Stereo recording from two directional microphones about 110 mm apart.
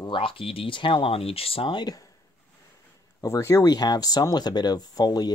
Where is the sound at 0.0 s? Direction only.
50° left (ahead or behind).